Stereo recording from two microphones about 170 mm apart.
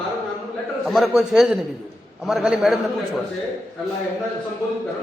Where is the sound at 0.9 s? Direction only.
Centre (ahead or behind).